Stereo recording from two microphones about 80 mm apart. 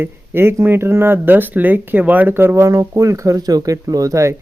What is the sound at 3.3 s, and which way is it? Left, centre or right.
Speech, right.